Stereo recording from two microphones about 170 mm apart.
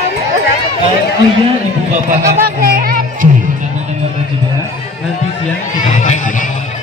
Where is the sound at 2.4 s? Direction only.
55° right (ahead or behind).